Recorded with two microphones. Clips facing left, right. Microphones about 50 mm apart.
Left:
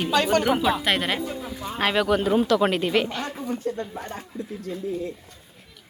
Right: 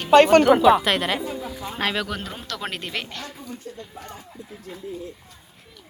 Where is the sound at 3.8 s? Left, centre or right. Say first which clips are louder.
Left 6 dB; left.